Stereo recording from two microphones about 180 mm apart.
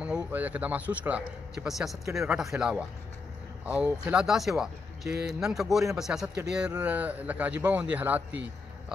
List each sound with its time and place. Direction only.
0.0 s speech: 5° right (ahead or behind)